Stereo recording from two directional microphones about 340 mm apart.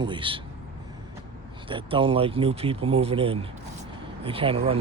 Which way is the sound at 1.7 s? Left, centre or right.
Centre.